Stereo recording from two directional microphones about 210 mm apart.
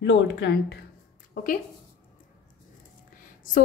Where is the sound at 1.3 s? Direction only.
40° left (ahead or behind).